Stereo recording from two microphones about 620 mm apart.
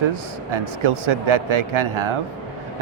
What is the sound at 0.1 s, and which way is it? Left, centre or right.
Speech, right.